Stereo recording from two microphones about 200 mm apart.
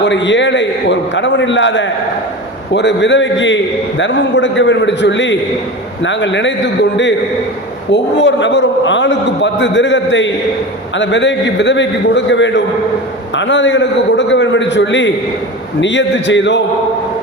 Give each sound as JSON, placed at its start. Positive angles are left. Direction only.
{"t": 0.0, "sound": "a man's voice", "side_deg": 65}
{"t": 7.9, "sound": "a man's voice", "side_deg": 60}